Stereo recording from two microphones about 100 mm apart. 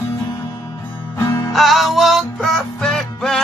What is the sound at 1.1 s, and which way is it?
Music, 30° left (ahead or behind).